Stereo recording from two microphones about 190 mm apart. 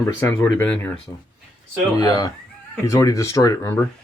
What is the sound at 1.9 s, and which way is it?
Speech, 20° left (ahead or behind).